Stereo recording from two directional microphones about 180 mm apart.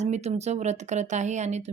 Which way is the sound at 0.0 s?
40° right (ahead or behind).